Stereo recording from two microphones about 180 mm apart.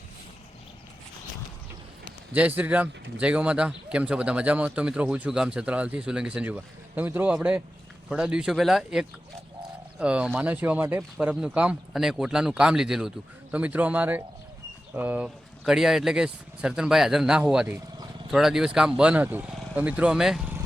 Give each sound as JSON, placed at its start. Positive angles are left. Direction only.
{"t": 2.3, "sound": "speech", "side_deg": -10}
{"t": 17.7, "sound": "a sound", "side_deg": -20}
{"t": 18.3, "sound": "speech", "side_deg": 0}